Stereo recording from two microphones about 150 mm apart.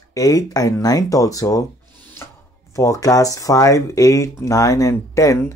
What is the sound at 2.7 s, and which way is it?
Speech, 20° left (ahead or behind).